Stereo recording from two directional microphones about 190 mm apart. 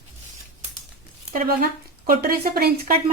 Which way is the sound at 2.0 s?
50° right (ahead or behind).